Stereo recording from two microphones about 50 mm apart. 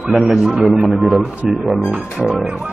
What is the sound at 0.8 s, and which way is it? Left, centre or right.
A man's voice, centre.